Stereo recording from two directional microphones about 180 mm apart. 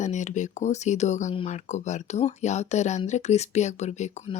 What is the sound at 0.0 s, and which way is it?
Speech, 40° left (ahead or behind).